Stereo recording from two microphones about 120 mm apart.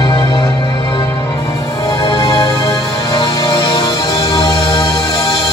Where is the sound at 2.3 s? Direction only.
30° left (ahead or behind).